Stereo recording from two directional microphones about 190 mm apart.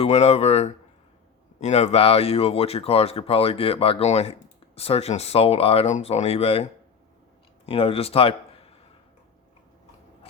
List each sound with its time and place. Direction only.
0.0 s speech: 35° left (ahead or behind)
7.7 s speech: 30° left (ahead or behind)